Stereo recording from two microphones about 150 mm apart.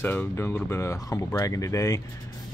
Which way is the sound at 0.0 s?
15° left (ahead or behind).